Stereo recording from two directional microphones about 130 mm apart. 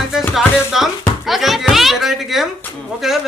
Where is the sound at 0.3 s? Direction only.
Centre (ahead or behind).